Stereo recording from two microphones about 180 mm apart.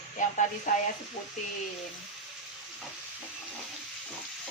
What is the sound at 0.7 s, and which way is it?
Speech, 45° left (ahead or behind).